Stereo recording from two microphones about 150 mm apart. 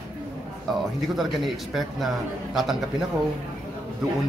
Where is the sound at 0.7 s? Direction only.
Centre (ahead or behind).